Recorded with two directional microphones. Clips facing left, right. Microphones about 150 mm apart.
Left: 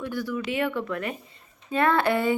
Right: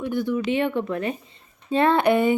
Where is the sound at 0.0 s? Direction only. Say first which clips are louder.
Right 5 dB; 20° right (ahead or behind).